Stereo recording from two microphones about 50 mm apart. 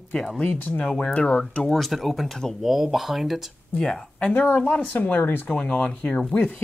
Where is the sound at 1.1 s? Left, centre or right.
Left.